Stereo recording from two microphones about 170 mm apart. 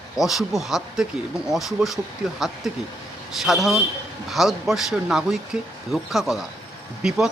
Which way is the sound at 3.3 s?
Centre (ahead or behind).